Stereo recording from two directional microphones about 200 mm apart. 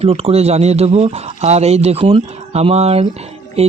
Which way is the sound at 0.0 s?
30° right (ahead or behind).